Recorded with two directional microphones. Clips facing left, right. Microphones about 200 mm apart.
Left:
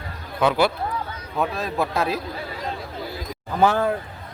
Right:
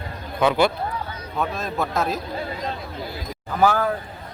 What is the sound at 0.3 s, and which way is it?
A man's voice, 5° left (ahead or behind).